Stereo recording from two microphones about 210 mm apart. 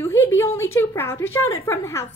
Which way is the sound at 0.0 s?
10° left (ahead or behind).